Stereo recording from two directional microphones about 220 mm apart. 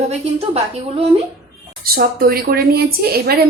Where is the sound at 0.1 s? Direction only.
30° right (ahead or behind).